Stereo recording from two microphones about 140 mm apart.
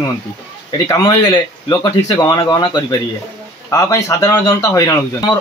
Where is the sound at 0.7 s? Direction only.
25° left (ahead or behind).